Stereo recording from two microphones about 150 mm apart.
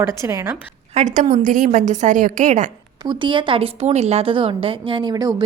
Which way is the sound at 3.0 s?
30° right (ahead or behind).